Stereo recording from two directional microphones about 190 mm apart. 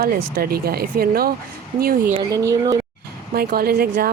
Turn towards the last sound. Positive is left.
turn(degrees=-50)  # may be behind; listen again after turning